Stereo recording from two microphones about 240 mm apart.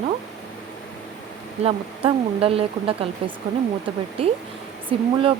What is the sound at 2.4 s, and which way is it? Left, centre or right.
Speech, right.